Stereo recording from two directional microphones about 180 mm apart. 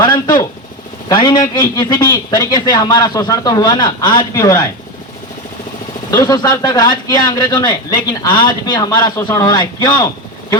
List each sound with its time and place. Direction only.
0.0 s speech: 25° left (ahead or behind)
6.1 s speech: 20° left (ahead or behind)